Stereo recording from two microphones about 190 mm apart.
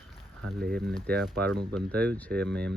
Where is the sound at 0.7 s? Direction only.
Centre (ahead or behind).